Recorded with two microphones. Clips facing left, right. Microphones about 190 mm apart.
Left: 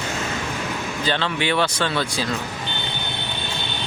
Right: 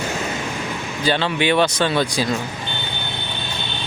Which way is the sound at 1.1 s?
15° right (ahead or behind).